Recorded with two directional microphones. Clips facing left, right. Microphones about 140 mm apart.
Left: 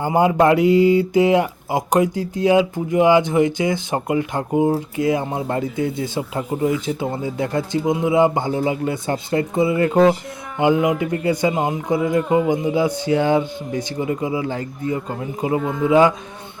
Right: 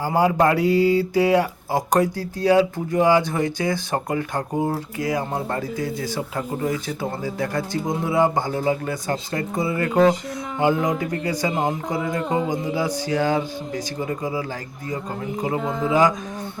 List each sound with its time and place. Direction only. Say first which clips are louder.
0.0 s speech: left 3 dB; 20° left (ahead or behind)
10.6 s music: left 3 dB; 20° left (ahead or behind)
11.0 s speech: left 5 dB; 25° left (ahead or behind)